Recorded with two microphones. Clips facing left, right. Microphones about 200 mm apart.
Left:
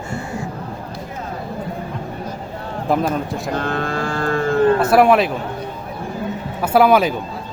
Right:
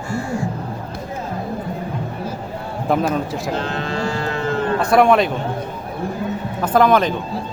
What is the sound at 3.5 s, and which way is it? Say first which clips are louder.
Livestock: left 3 dB; 55° left (ahead or behind).